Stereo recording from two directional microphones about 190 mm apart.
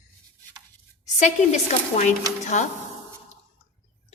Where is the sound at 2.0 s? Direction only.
40° left (ahead or behind).